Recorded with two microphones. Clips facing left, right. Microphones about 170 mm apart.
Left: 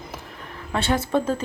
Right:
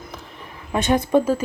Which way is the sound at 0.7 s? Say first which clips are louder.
Right 4 dB; 15° right (ahead or behind).